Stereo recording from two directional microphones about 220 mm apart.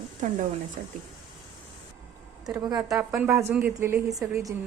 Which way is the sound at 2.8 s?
5° right (ahead or behind).